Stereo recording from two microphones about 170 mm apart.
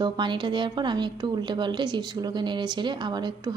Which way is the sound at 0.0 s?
25° right (ahead or behind).